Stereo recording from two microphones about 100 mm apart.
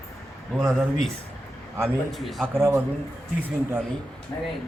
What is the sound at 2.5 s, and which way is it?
Speech, 25° right (ahead or behind).